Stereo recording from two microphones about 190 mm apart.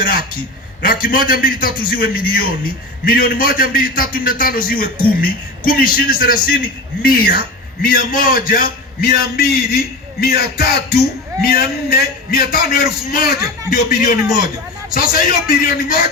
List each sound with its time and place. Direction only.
0.0 s a man's voice: 50° left (ahead or behind)